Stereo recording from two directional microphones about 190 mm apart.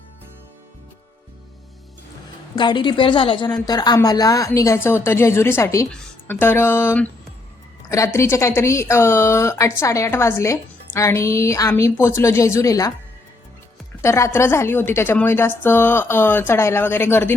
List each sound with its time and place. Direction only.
2.6 s a woman's voice: 25° left (ahead or behind)
14.0 s a woman's voice: 15° left (ahead or behind)